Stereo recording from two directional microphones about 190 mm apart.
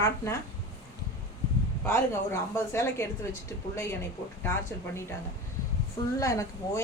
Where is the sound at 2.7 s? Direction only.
15° left (ahead or behind).